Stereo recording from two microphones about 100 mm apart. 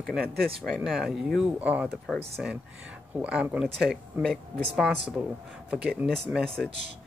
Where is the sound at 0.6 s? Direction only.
Centre (ahead or behind).